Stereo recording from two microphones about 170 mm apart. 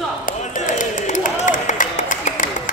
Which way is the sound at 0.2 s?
50° left (ahead or behind).